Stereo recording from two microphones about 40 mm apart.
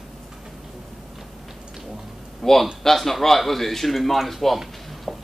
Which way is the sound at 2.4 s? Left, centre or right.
Centre.